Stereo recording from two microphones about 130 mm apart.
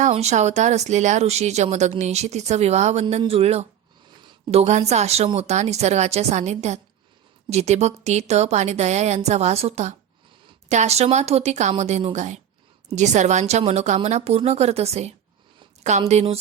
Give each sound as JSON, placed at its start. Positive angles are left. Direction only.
{"t": 0.1, "sound": "a woman's voice", "side_deg": -60}